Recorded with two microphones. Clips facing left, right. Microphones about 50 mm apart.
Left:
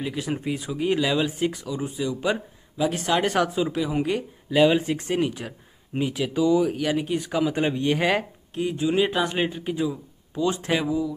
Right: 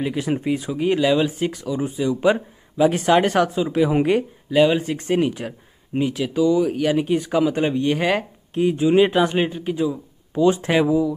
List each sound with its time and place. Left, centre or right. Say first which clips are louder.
0.0 s speech: right 5 dB; centre
1.7 s speech: right 5 dB; centre
3.3 s speech: right 3 dB; centre
3.7 s speech: right 7 dB; right
4.5 s speech: right 2 dB; centre
5.0 s speech: right 5 dB; centre
5.9 s speech: right 4 dB; centre
6.7 s speech: right 5 dB; centre
8.5 s speech: right 7 dB; centre
10.3 s speech: right 7 dB; centre